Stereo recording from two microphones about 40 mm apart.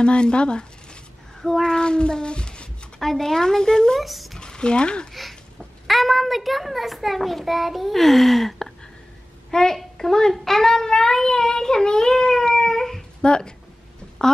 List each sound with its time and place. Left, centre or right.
0.0 s speech: left
1.4 s speech: centre
3.0 s child singing: centre
4.0 s speech: centre
4.4 s speech: left
5.9 s a child's voice: centre
10.3 s child singing: centre
13.2 s speech: left